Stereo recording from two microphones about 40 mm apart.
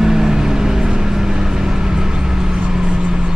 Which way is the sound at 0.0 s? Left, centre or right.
Centre.